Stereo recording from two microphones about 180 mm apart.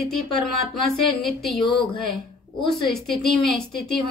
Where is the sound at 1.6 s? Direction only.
30° left (ahead or behind).